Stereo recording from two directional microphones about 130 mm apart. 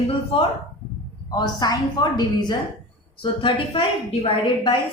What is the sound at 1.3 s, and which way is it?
A woman's voice, 30° left (ahead or behind).